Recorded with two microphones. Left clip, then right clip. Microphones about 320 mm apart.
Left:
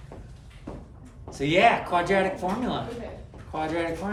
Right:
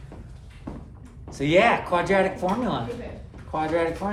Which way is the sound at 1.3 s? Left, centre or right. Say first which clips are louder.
Right 1 dB; centre.